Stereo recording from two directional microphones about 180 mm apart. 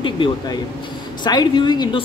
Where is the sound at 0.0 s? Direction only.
25° left (ahead or behind).